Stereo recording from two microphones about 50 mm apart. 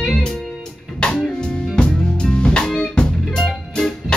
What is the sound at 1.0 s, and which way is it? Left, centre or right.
Music, left.